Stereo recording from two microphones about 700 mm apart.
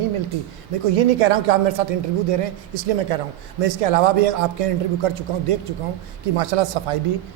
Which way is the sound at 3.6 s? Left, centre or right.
Right.